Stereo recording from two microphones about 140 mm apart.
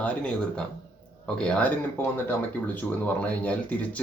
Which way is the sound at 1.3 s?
5° left (ahead or behind).